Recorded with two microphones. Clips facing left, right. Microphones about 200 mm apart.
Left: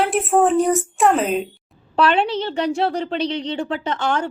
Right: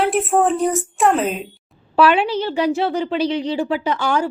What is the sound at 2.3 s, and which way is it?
Speech, 30° left (ahead or behind).